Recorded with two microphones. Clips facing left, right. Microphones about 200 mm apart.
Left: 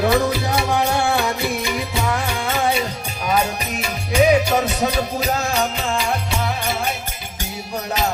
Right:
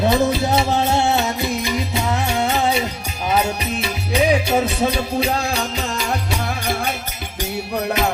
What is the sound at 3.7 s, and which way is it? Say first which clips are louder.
Music: left 4 dB; 30° right (ahead or behind).